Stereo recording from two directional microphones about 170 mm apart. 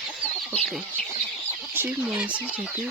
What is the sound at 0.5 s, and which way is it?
Speech, 5° left (ahead or behind).